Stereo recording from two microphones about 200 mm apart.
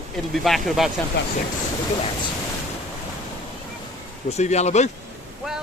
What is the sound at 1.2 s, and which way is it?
Speech, 55° left (ahead or behind).